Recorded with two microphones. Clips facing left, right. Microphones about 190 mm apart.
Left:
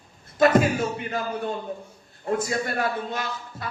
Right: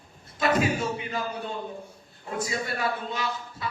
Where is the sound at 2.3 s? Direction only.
50° left (ahead or behind).